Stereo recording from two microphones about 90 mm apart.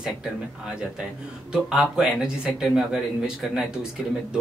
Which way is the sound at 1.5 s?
5° right (ahead or behind).